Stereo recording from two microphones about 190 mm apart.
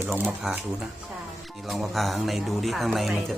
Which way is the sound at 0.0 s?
10° right (ahead or behind).